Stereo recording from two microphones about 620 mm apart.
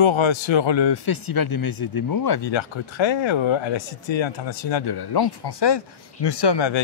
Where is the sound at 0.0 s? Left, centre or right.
Left.